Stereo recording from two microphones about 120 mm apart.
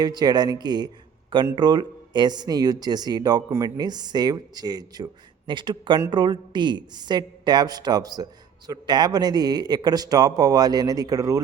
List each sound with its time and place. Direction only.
0.0 s a woman's voice: 35° right (ahead or behind)